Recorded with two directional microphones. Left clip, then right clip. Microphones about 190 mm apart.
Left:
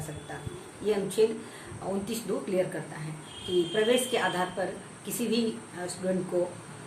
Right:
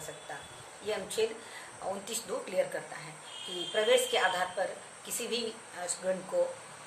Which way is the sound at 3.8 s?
15° right (ahead or behind).